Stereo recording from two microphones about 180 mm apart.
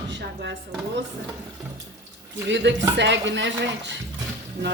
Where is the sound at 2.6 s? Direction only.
85° right.